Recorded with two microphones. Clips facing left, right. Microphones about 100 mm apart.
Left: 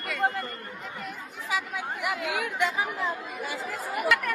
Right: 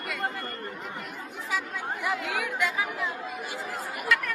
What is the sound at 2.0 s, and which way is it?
Speech, 15° left (ahead or behind).